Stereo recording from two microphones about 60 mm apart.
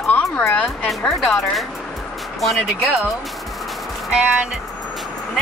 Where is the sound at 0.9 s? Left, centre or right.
Centre.